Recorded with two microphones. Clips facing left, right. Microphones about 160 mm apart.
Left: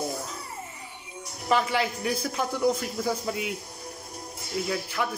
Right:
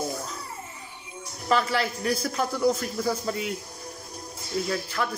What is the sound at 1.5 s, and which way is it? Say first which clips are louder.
A man's voice: even; 15° left (ahead or behind).